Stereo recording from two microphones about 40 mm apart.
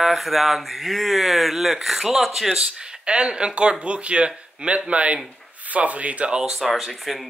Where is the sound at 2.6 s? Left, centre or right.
Right.